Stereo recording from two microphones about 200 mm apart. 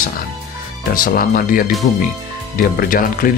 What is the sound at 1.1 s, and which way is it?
Speech, 45° left (ahead or behind).